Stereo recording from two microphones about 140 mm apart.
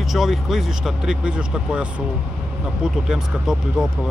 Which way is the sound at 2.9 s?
5° right (ahead or behind).